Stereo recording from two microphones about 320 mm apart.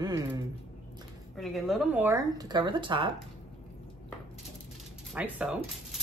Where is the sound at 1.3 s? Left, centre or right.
Centre.